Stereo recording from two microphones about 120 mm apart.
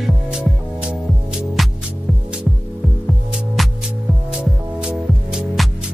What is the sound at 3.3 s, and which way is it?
Music, 5° right (ahead or behind).